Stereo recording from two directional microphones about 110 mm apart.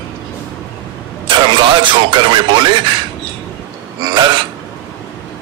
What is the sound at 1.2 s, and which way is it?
Speech, 45° right (ahead or behind).